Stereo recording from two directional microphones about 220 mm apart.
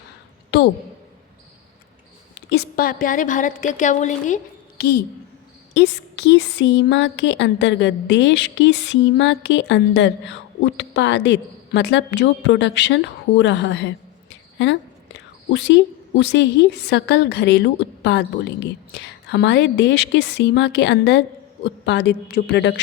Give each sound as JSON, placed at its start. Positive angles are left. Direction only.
{"t": 2.5, "sound": "a woman's voice", "side_deg": 45}
{"t": 4.8, "sound": "speech", "side_deg": 45}